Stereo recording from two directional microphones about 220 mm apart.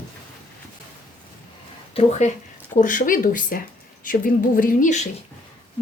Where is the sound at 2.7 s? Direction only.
35° left (ahead or behind).